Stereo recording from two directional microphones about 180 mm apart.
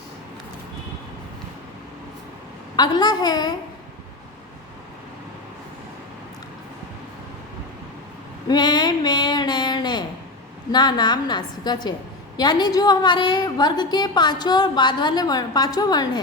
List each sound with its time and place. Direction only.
2.7 s a woman's voice: 25° left (ahead or behind)
8.4 s a sound: 25° left (ahead or behind)
10.7 s a woman's voice: 25° left (ahead or behind)